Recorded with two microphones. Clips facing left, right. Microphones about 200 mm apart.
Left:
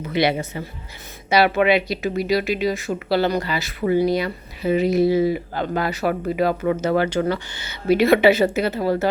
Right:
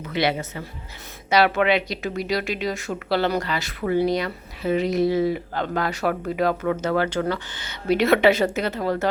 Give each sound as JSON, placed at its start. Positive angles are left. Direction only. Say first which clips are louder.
{"t": 0.1, "sound": "a woman's voice", "louder": "left 3 dB", "side_deg": 15}